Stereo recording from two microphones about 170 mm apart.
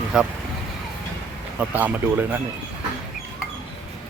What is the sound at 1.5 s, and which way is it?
Speech, 10° right (ahead or behind).